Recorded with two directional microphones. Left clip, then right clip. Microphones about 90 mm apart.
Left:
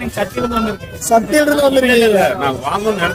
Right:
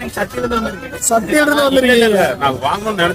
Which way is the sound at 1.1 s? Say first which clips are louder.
Left 1 dB; 15° right (ahead or behind).